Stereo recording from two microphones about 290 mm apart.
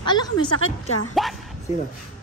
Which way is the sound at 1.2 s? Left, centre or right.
Centre.